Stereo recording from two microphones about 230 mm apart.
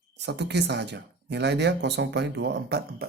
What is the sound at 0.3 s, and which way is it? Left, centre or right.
Speech, right.